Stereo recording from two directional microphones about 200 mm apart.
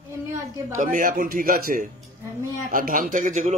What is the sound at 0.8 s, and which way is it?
A man's voice, 40° right (ahead or behind).